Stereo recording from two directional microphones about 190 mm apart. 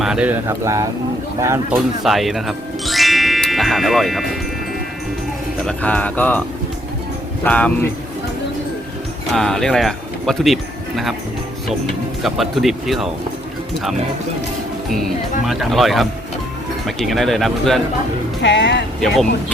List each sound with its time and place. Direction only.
0.0 s speech: 5° right (ahead or behind)
2.0 s music: centre (ahead or behind)
5.6 s speech: 10° left (ahead or behind)
7.4 s speech: 5° left (ahead or behind)
9.3 s speech: centre (ahead or behind)
12.2 s speech: centre (ahead or behind)
14.9 s speech: centre (ahead or behind)
18.4 s speech: 70° left (ahead or behind)
18.9 s speech: centre (ahead or behind)